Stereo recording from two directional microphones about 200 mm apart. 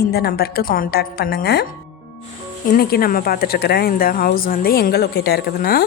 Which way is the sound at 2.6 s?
45° left (ahead or behind).